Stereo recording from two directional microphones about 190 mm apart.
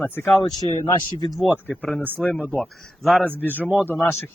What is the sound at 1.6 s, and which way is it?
Speech, centre (ahead or behind).